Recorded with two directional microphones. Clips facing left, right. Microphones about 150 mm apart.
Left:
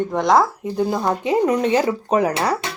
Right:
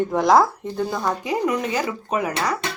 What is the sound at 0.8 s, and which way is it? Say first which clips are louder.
Speech: left 4 dB; 20° left (ahead or behind).